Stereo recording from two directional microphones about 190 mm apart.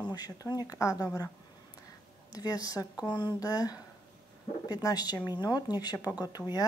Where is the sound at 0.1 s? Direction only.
20° left (ahead or behind).